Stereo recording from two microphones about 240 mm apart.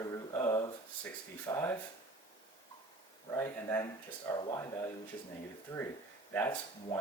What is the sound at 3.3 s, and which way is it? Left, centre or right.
Speech, centre.